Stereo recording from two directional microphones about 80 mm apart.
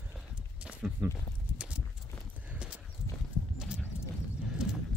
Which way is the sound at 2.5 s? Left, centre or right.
Centre.